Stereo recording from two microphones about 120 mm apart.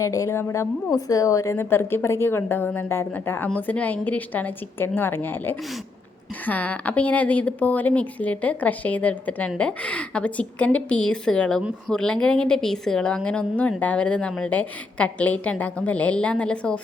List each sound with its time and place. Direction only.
0.0 s a woman's voice: 25° left (ahead or behind); by 16.8 s 10° left (ahead or behind)